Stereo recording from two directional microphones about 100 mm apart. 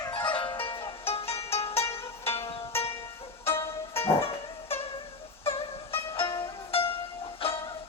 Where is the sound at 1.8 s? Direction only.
25° left (ahead or behind).